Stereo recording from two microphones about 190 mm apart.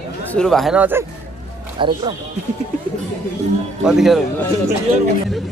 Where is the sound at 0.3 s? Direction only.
5° left (ahead or behind).